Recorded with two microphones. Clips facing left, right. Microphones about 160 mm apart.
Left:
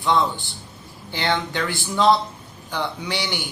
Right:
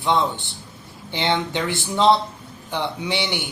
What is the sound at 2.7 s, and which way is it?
Speech, 25° right (ahead or behind).